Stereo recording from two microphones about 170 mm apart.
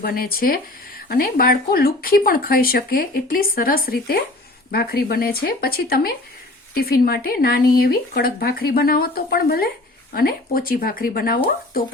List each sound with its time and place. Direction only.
0.0 s speech: 60° left (ahead or behind)